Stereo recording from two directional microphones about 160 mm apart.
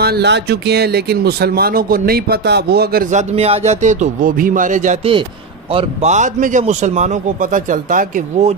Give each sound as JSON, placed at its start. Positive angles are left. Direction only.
{"t": 0.0, "sound": "speech", "side_deg": -85}
{"t": 5.7, "sound": "a man's voice", "side_deg": -40}